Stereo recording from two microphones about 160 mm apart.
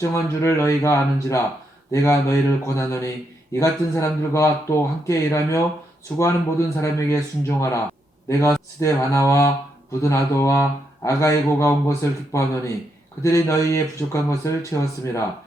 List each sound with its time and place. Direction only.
0.1 s a man's voice: 15° left (ahead or behind)